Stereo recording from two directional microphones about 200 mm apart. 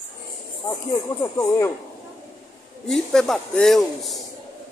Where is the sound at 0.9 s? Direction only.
20° left (ahead or behind).